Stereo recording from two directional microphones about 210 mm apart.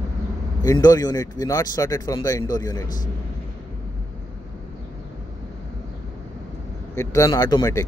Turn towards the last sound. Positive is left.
turn(degrees=15)  # may be behind; listen again after turning